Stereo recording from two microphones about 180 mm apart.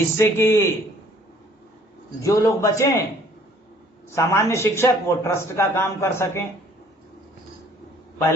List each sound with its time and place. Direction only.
0.2 s a man's voice: 15° left (ahead or behind)
2.2 s a man's voice: 15° left (ahead or behind)
4.1 s a man's voice: 15° left (ahead or behind)